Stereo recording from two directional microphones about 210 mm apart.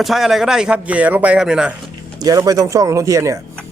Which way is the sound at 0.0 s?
Centre (ahead or behind).